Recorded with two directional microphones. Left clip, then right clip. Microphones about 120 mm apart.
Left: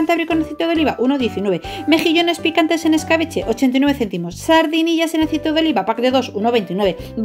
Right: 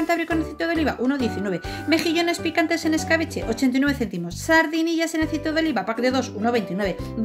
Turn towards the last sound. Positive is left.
turn(degrees=15)  # may be behind; listen again after turning